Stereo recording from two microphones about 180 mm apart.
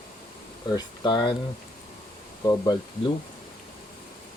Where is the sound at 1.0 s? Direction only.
25° left (ahead or behind).